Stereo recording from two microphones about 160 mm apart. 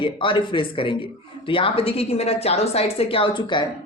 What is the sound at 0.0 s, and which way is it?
A woman's voice, 30° left (ahead or behind).